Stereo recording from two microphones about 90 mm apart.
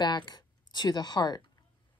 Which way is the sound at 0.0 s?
50° left (ahead or behind).